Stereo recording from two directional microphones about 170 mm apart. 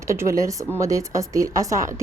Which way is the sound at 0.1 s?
15° right (ahead or behind).